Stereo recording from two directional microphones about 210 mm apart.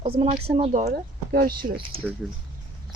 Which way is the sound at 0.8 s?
45° right (ahead or behind).